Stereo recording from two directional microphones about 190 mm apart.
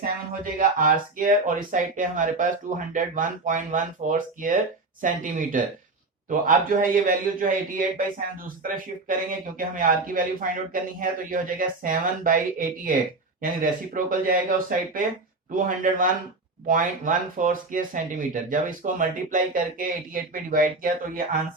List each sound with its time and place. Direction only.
0.8 s speech: 45° right (ahead or behind)